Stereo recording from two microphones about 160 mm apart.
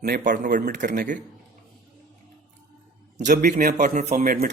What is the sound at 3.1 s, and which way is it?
Speech, 50° right (ahead or behind).